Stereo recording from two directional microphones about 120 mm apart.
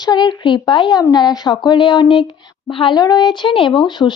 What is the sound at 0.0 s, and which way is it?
A woman's voice, 35° left (ahead or behind).